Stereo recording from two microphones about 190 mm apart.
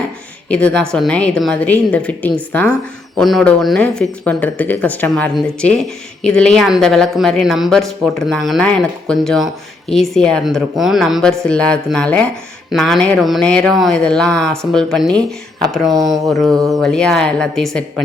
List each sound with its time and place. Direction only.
0.4 s speech: 5° left (ahead or behind)